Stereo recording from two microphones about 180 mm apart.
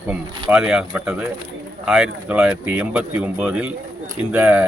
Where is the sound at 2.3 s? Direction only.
5° right (ahead or behind).